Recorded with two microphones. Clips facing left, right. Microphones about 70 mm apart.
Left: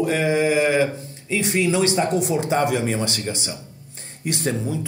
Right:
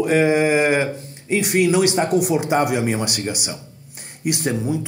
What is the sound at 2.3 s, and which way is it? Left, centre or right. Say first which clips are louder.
Speech: right 2 dB; right.